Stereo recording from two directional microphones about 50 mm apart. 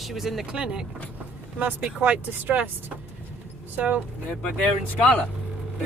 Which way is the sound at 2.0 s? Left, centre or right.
Right.